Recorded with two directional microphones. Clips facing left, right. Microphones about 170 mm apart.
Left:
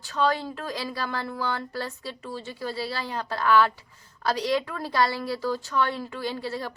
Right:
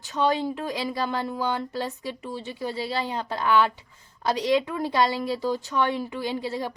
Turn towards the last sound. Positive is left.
turn(degrees=-15)  # may be behind; listen again after turning